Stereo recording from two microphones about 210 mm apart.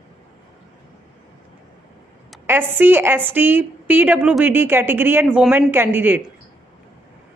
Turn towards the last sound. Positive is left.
turn(degrees=-10)  # may be behind; listen again after turning